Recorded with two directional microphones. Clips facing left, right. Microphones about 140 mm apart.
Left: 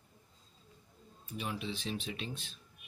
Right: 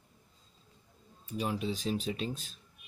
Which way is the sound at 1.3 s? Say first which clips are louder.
Right 6 dB; 35° right (ahead or behind).